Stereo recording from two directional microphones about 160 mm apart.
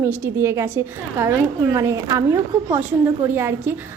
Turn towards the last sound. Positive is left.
turn(degrees=-15)  # may be behind; listen again after turning